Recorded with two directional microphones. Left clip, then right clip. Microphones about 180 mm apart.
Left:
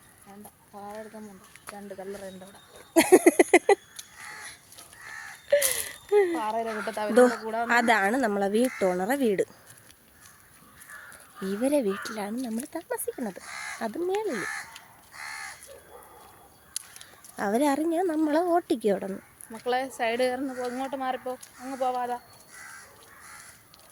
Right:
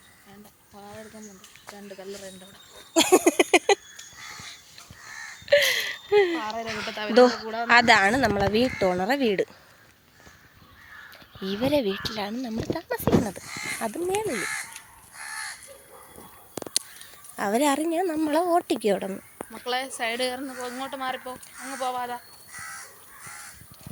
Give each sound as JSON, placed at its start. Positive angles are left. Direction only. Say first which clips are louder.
{"t": 1.9, "sound": "speech", "louder": "left 1 dB", "side_deg": 20}
{"t": 2.9, "sound": "a sound", "louder": "left 1 dB", "side_deg": 25}
{"t": 5.5, "sound": "a sound", "louder": "right 5 dB", "side_deg": 0}
{"t": 6.4, "sound": "speech", "louder": "left 2 dB", "side_deg": 35}
{"t": 6.7, "sound": "speech", "louder": "even", "side_deg": 5}
{"t": 6.9, "sound": "speech", "louder": "even", "side_deg": 30}
{"t": 7.2, "sound": "speech", "louder": "right 3 dB", "side_deg": 0}
{"t": 11.4, "sound": "speech", "louder": "right 1 dB", "side_deg": 5}
{"t": 17.3, "sound": "a woman's voice", "louder": "right 2 dB", "side_deg": 10}
{"t": 19.6, "sound": "speech", "louder": "left 1 dB", "side_deg": 40}